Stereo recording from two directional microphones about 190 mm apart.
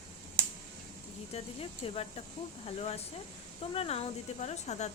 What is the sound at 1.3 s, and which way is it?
Speech, 30° left (ahead or behind).